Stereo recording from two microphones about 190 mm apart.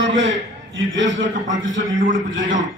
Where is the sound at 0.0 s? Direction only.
75° right (ahead or behind).